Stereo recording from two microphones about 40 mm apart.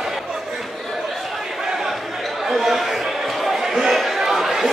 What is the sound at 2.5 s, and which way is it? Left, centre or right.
Chatter, centre.